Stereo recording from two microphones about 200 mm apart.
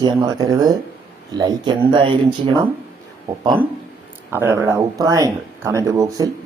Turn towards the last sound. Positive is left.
turn(degrees=-15)  # may be behind; listen again after turning